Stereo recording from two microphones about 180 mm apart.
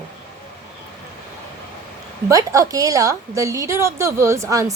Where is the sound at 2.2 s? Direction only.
20° right (ahead or behind).